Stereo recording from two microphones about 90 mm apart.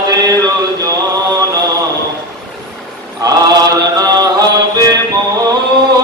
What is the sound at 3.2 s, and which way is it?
Mantra, 45° right (ahead or behind).